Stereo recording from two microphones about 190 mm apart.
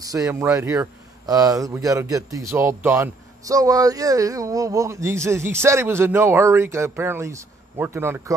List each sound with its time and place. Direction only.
0.0 s speech: 20° right (ahead or behind)